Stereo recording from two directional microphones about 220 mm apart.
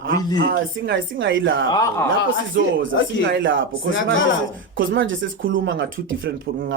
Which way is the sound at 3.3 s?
55° right (ahead or behind).